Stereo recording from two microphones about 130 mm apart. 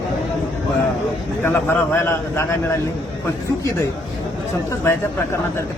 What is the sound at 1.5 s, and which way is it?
A man's voice, 15° left (ahead or behind).